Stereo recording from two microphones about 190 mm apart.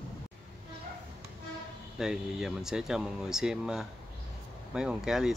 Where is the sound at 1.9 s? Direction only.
5° right (ahead or behind).